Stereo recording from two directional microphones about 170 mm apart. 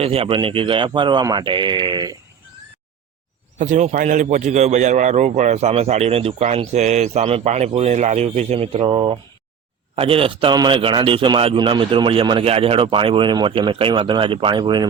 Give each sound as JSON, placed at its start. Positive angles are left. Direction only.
{"t": 0.0, "sound": "speech", "side_deg": -35}
{"t": 3.6, "sound": "a man's voice", "side_deg": -45}